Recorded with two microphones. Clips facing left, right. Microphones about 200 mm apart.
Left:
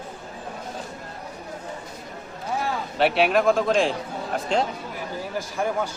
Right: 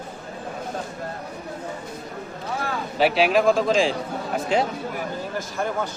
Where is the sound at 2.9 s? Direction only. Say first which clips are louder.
Right 1 dB; centre (ahead or behind).